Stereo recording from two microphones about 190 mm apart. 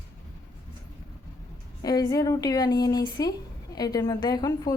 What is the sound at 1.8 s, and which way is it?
A woman's voice, 20° left (ahead or behind).